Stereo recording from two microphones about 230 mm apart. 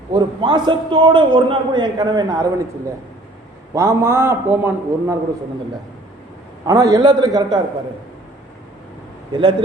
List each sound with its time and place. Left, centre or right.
0.1 s a man's voice: centre
3.8 s a man's voice: centre
6.7 s a man's voice: centre
9.3 s a man's voice: right